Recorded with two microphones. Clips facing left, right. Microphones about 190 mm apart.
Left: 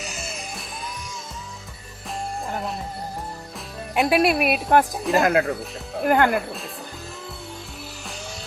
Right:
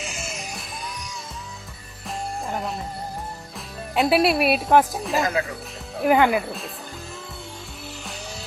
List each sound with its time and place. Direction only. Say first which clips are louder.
2.0 s music: even; centre (ahead or behind)
3.9 s a woman's voice: even; centre (ahead or behind)
5.2 s speech: left 6 dB; 65° left (ahead or behind)
6.0 s a woman's voice: right 1 dB; centre (ahead or behind)